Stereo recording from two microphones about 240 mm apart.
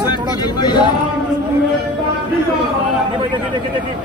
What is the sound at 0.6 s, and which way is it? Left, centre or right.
Speech, centre.